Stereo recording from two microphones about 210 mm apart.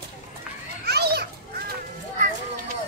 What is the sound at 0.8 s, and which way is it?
Children playing, 50° right (ahead or behind).